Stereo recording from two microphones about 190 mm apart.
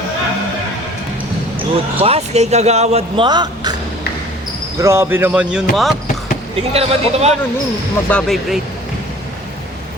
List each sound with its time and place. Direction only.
1.5 s speech: 30° right (ahead or behind)
3.2 s a woman's voice: 20° right (ahead or behind)
4.8 s speech: 15° right (ahead or behind)
6.6 s speech: 30° right (ahead or behind)
8.1 s speech: centre (ahead or behind)